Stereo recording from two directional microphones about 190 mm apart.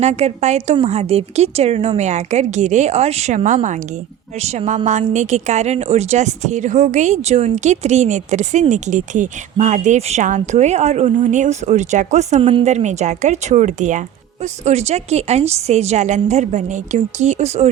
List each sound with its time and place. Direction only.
0.0 s speech: 35° right (ahead or behind)